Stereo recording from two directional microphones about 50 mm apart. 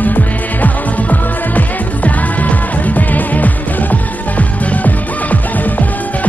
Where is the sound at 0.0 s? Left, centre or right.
Left.